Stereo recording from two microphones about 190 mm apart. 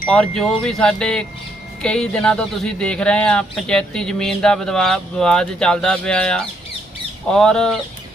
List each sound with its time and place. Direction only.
0.1 s speech: 5° left (ahead or behind)